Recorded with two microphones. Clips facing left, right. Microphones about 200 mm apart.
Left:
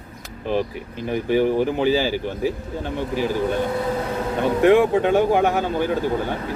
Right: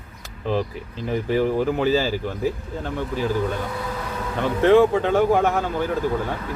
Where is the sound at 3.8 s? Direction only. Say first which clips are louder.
Left 6 dB; 30° left (ahead or behind).